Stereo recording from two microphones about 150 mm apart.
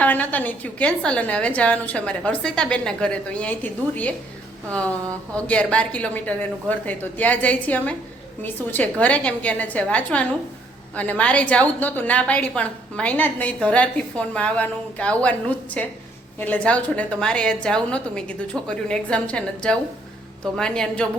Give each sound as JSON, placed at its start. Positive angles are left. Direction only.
{"t": 0.0, "sound": "a woman's voice", "side_deg": 10}